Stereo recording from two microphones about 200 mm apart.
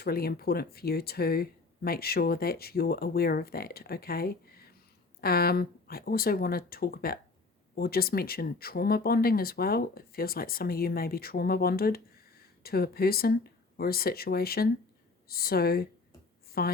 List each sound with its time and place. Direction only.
0.0 s speech: 50° left (ahead or behind)